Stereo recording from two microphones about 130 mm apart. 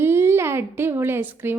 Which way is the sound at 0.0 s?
20° right (ahead or behind).